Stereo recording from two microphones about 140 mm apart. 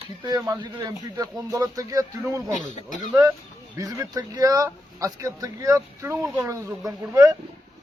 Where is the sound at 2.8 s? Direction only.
65° left (ahead or behind).